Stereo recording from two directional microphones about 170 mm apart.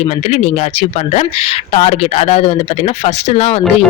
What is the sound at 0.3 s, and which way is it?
Speech, 40° left (ahead or behind).